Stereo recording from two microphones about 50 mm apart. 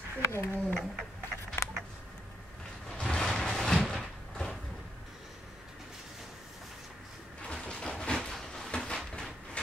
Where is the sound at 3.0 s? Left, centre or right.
Centre.